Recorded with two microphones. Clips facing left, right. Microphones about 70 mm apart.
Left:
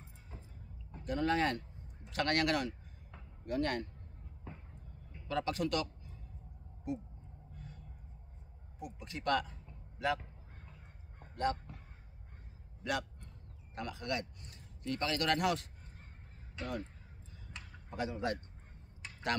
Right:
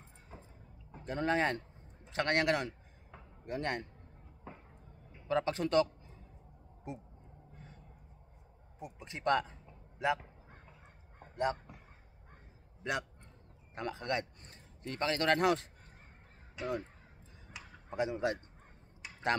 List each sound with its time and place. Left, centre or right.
1.0 s a man's voice: right
4.5 s a sound: centre
5.3 s a man's voice: right
7.5 s music: right
8.7 s a man's voice: right
11.1 s a sound: centre
12.8 s a sound: right
13.7 s a man's voice: right
16.6 s speech: centre
17.8 s a man's voice: right